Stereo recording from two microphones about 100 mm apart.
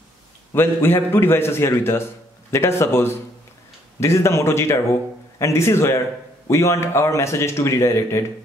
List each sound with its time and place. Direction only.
0.5 s a man's voice: 25° left (ahead or behind)